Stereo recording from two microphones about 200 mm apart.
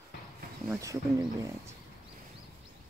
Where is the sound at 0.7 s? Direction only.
15° right (ahead or behind).